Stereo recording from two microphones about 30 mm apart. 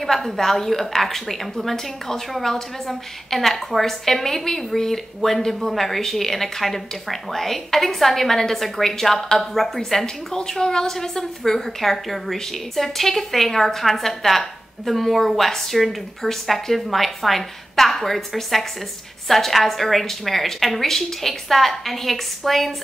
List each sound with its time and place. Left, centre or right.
0.0 s a woman's voice: centre